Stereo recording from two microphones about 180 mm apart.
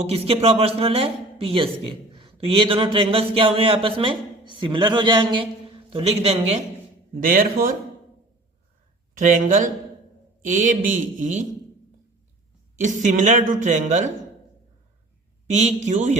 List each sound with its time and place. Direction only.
0.0 s a man's voice: 35° right (ahead or behind)
7.2 s a woman's voice: 50° right (ahead or behind)
9.1 s a woman's voice: 45° right (ahead or behind)
12.8 s a woman's voice: 45° right (ahead or behind)
15.5 s a man's voice: 40° right (ahead or behind)